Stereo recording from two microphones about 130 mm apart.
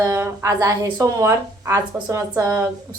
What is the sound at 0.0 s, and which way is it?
A woman's voice, 25° right (ahead or behind).